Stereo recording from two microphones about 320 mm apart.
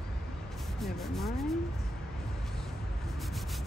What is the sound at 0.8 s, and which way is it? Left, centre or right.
Speech, centre.